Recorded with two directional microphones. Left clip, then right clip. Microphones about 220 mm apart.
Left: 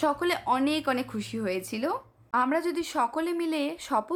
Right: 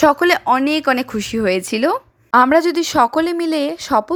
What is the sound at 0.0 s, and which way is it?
Speech, 30° right (ahead or behind).